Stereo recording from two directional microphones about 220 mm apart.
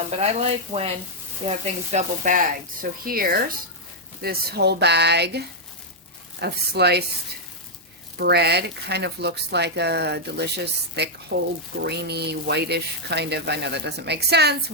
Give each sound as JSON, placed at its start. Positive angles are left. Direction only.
{"t": 0.2, "sound": "frying", "side_deg": -25}
{"t": 1.5, "sound": "speech", "side_deg": -30}
{"t": 8.2, "sound": "speech", "side_deg": -50}